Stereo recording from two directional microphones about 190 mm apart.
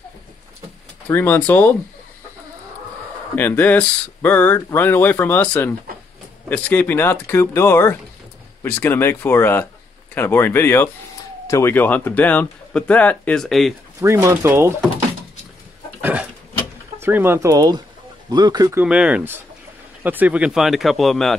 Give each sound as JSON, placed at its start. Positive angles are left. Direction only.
{"t": 1.0, "sound": "speech", "side_deg": 10}
{"t": 3.3, "sound": "speech", "side_deg": 10}
{"t": 14.0, "sound": "speech", "side_deg": -15}
{"t": 16.0, "sound": "pig", "side_deg": -10}
{"t": 17.0, "sound": "speech", "side_deg": -10}